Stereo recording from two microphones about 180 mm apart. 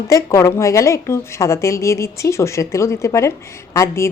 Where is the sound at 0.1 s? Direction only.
15° left (ahead or behind).